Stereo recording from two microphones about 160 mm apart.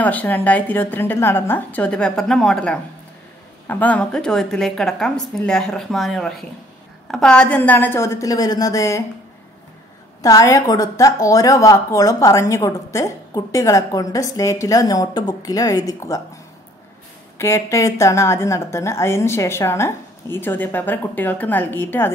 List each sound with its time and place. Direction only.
0.0 s a woman's voice: 10° left (ahead or behind)
10.2 s a woman's voice: 20° left (ahead or behind)
17.4 s a woman's voice: 15° left (ahead or behind)